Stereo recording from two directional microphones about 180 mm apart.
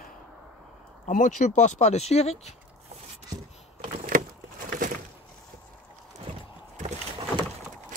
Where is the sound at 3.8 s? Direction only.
45° right (ahead or behind).